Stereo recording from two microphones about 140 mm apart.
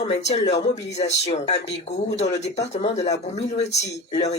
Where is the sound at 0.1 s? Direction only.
50° left (ahead or behind).